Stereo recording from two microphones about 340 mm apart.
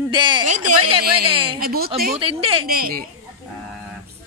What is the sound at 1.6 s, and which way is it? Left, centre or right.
A woman's voice, right.